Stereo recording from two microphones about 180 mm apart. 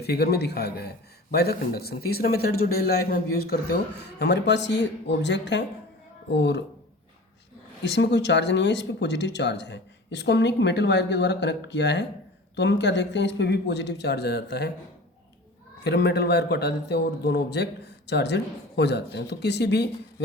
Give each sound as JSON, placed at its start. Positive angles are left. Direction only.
{"t": 0.0, "sound": "a man's voice", "side_deg": 60}
{"t": 7.8, "sound": "a man's voice", "side_deg": 70}
{"t": 15.8, "sound": "a man's voice", "side_deg": 65}